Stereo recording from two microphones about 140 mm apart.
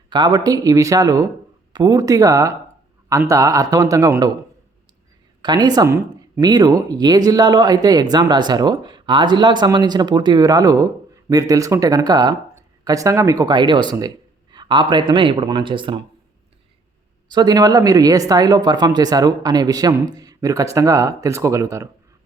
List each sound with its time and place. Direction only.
0.1 s speech: 30° right (ahead or behind)
5.4 s speech: 30° right (ahead or behind)
17.2 s speech: 30° right (ahead or behind)